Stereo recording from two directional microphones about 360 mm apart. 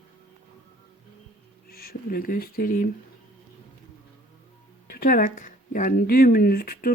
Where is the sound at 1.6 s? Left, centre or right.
Left.